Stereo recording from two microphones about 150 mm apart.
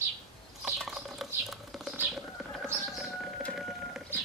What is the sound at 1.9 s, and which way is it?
Bird, 10° right (ahead or behind).